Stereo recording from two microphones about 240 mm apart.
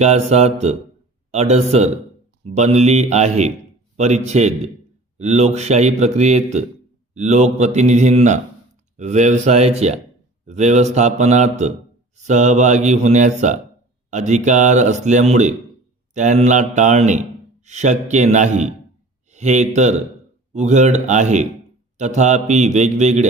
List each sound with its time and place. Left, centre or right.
0.0 s a man's voice: right